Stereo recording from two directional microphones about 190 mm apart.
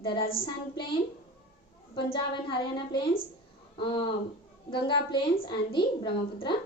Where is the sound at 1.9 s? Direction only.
25° left (ahead or behind).